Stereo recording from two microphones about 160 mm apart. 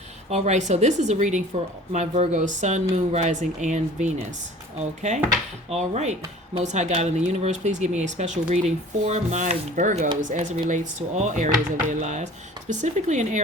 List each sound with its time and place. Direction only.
0.3 s speech: 45° right (ahead or behind)
5.7 s speech: 45° right (ahead or behind)